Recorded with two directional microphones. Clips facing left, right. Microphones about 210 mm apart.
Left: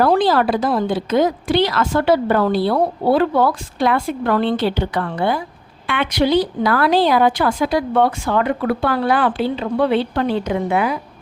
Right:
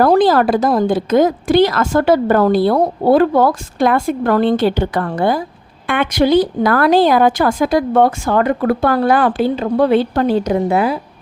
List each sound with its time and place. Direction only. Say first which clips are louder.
0.0 s a woman's voice: right 4 dB; 45° right (ahead or behind)